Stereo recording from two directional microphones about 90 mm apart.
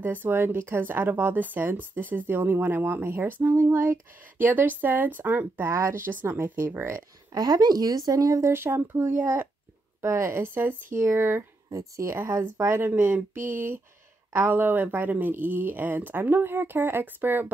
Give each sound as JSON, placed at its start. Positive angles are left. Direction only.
{"t": 0.0, "sound": "speech", "side_deg": -20}
{"t": 7.3, "sound": "speech", "side_deg": -45}
{"t": 10.0, "sound": "speech", "side_deg": -30}